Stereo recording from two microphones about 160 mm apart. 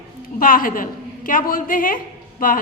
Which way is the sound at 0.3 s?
60° left (ahead or behind).